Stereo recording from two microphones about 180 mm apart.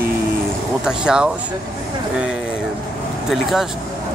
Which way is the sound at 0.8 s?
5° right (ahead or behind).